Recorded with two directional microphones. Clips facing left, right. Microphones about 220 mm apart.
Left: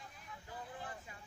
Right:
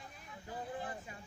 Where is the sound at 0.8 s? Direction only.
20° right (ahead or behind).